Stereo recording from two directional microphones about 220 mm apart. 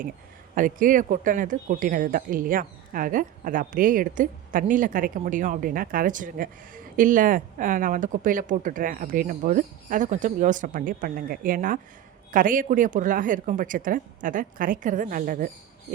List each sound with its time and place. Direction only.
0.5 s speech: 35° right (ahead or behind)